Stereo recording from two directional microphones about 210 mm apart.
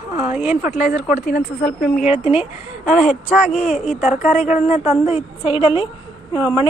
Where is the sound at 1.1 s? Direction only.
45° left (ahead or behind).